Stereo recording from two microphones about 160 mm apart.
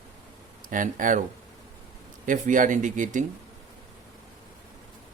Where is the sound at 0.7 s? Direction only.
55° right (ahead or behind).